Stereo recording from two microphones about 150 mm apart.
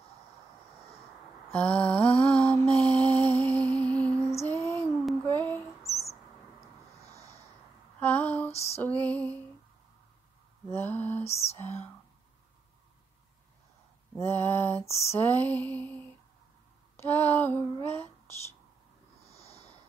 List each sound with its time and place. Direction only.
1.5 s mantra: 10° left (ahead or behind)
2.7 s music: 10° left (ahead or behind)
4.5 s a sound: 20° left (ahead or behind)
8.0 s female singing: 10° left (ahead or behind)
8.5 s female singing: 45° left (ahead or behind)
8.7 s music: 10° left (ahead or behind)
10.7 s a sound: 10° left (ahead or behind)
11.5 s whispering: 15° left (ahead or behind)
14.1 s a sound: 15° left (ahead or behind)
15.0 s lullaby: 15° left (ahead or behind)
16.9 s a sound: 15° left (ahead or behind)
19.3 s snort: 45° left (ahead or behind)